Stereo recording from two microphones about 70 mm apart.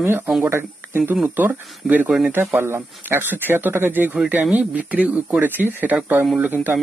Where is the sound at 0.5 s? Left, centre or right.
Right.